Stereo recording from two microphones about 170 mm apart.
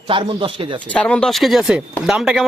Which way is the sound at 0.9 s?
5° left (ahead or behind).